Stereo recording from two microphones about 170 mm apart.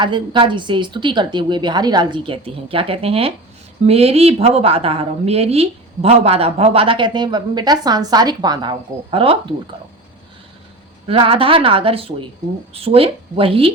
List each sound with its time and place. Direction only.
0.0 s a woman's voice: 30° right (ahead or behind)
11.1 s a woman's voice: 35° right (ahead or behind)